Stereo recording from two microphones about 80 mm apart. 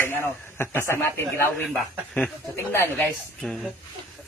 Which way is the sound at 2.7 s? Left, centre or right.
Left.